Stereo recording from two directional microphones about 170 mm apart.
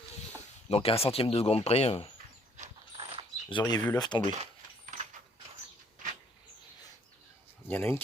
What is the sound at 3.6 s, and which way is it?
Speech, 10° left (ahead or behind).